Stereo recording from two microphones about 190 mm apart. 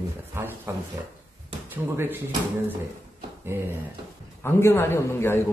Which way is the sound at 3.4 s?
15° right (ahead or behind).